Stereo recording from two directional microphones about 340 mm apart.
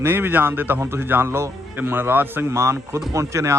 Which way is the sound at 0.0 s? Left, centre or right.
Centre.